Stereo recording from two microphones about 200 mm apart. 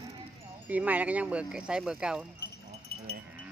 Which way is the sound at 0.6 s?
10° right (ahead or behind).